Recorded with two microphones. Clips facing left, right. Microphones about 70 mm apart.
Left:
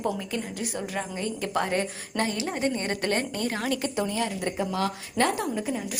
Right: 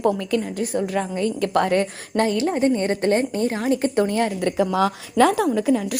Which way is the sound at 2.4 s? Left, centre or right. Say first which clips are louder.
Right 8 dB; right.